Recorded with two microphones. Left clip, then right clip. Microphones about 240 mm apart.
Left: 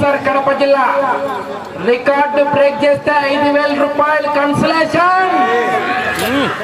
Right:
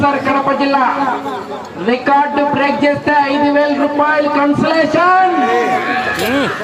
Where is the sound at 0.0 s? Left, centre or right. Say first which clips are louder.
Even; left.